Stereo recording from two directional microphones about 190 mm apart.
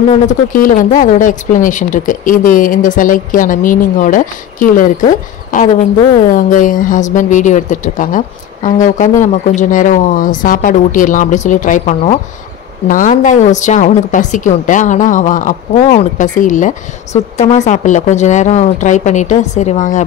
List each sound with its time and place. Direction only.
0.1 s a woman's voice: 45° left (ahead or behind)